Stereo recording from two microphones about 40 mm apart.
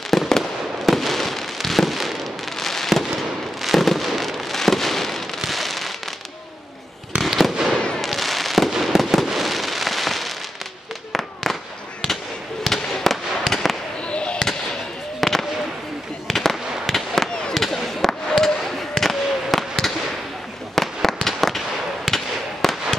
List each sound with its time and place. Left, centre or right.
0.1 s fireworks: centre
7.2 s fireworks: centre
12.6 s fireworks: centre
14.0 s fireworks: left
15.1 s fireworks: centre